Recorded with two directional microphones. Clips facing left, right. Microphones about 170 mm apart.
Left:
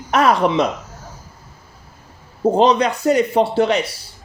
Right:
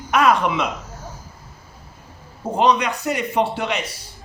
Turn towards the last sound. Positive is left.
turn(degrees=30)  # may be behind; listen again after turning